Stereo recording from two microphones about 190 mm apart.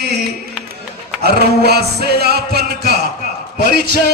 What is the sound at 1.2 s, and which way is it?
Music, 55° right (ahead or behind).